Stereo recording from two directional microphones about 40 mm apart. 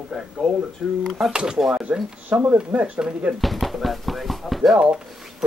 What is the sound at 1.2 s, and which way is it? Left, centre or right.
Speech, centre.